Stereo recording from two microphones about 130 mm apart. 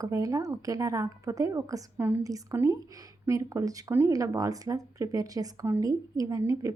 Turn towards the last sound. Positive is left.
turn(degrees=-25)  # may be behind; listen again after turning